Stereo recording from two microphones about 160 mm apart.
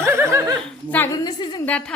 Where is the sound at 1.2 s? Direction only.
25° left (ahead or behind).